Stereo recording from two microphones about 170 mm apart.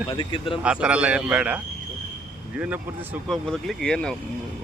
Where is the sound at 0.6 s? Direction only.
5° right (ahead or behind).